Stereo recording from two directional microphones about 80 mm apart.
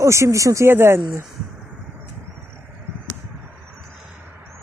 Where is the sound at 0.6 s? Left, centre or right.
Right.